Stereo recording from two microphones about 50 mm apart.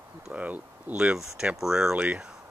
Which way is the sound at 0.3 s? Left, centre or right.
Right.